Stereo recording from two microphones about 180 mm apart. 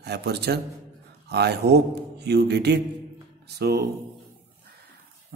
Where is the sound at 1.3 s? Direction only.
70° right (ahead or behind).